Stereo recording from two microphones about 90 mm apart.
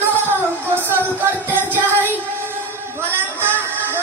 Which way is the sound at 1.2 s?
25° right (ahead or behind).